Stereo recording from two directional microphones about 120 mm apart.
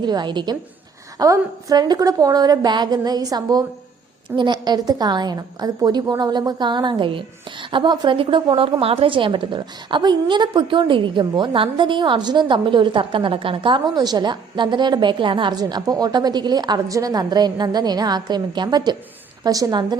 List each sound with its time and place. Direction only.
0.0 s a woman's voice: 40° right (ahead or behind)